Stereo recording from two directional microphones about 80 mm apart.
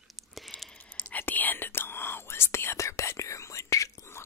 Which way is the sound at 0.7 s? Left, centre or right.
Left.